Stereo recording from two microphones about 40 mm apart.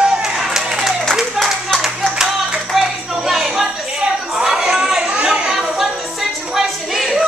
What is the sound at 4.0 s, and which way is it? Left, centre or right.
Chatter, centre.